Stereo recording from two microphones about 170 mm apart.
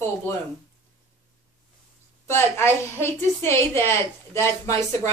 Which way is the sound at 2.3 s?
15° left (ahead or behind).